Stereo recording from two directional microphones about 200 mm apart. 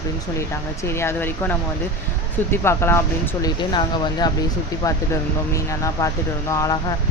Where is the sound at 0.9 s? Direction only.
10° left (ahead or behind).